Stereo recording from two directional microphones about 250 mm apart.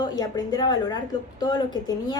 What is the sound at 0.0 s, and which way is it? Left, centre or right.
A woman's voice, centre.